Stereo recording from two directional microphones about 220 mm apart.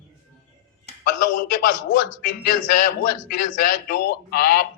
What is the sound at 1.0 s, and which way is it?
A man's voice, 40° left (ahead or behind).